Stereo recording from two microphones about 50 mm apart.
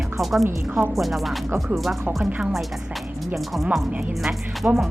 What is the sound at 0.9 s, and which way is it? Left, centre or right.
Speech, centre.